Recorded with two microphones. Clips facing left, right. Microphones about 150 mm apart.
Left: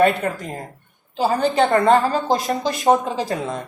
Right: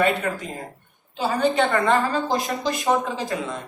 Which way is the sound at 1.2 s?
40° left (ahead or behind).